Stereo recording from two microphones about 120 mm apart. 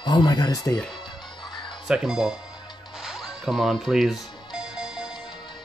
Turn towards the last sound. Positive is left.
turn(degrees=-5)  # may be behind; listen again after turning